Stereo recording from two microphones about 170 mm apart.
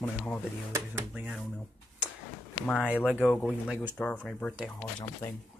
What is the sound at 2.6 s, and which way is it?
Speech, 5° left (ahead or behind).